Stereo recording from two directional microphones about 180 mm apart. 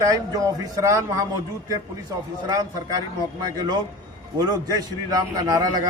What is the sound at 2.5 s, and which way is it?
Speech, 20° right (ahead or behind).